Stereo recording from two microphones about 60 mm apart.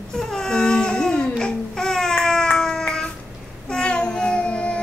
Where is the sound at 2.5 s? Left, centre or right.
Centre.